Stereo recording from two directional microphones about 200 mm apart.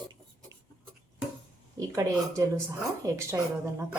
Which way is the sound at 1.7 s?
15° right (ahead or behind).